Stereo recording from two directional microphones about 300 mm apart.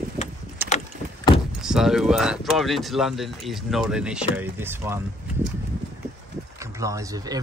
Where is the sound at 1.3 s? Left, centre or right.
Centre.